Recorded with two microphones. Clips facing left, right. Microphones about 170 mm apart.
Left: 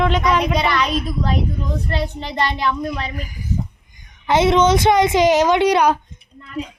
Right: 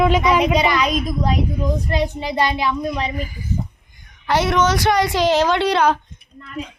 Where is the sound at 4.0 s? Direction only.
20° left (ahead or behind).